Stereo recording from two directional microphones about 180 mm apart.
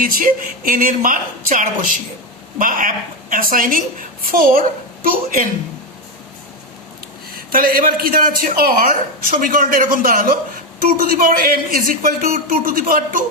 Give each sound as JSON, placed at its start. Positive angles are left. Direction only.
{"t": 0.0, "sound": "a man's voice", "side_deg": -50}
{"t": 7.3, "sound": "a man's voice", "side_deg": -55}